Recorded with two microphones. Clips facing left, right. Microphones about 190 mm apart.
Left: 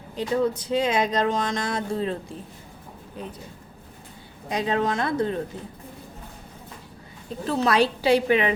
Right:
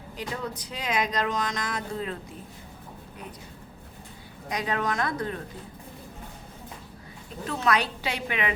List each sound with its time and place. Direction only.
0.2 s speech: 25° left (ahead or behind)
4.4 s speech: 25° left (ahead or behind)
7.4 s a woman's voice: 30° left (ahead or behind)